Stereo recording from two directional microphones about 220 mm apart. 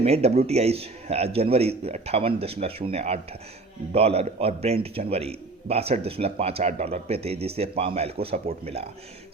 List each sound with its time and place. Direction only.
0.0 s a man's voice: 30° right (ahead or behind)